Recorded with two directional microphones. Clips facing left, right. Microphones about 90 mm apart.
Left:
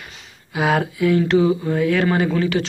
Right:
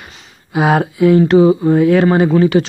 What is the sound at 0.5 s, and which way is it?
Speech, 25° right (ahead or behind).